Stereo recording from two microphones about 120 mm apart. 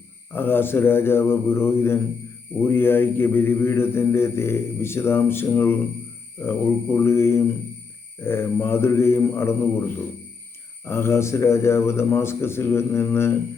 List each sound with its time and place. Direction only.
0.3 s mantra: 20° left (ahead or behind)
10.8 s mantra: 20° left (ahead or behind)